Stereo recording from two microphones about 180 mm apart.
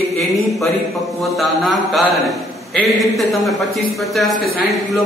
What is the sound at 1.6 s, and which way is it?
Speech, centre (ahead or behind).